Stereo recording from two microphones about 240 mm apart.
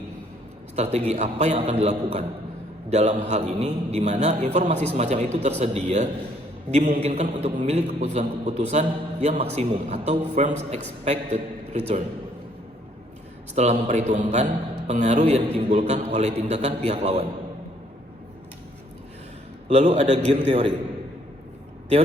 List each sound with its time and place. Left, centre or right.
0.8 s a man's voice: right
13.6 s a man's voice: right
19.6 s a man's voice: right